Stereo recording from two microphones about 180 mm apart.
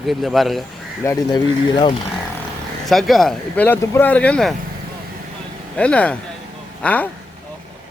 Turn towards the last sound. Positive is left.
turn(degrees=10)  # may be behind; listen again after turning